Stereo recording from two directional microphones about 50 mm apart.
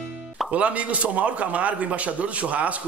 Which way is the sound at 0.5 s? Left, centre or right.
Right.